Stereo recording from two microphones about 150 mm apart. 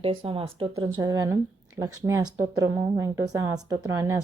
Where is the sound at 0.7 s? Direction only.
25° right (ahead or behind).